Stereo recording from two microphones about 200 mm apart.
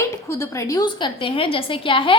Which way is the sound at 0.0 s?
15° left (ahead or behind).